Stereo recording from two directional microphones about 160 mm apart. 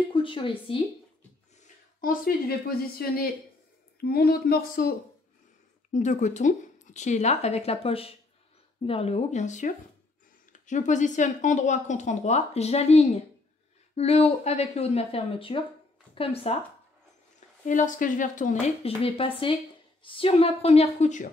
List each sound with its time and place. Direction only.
0.0 s speech: 35° left (ahead or behind)
2.0 s a woman's voice: 65° left (ahead or behind)
5.9 s speech: 50° left (ahead or behind)
17.6 s speech: 50° left (ahead or behind)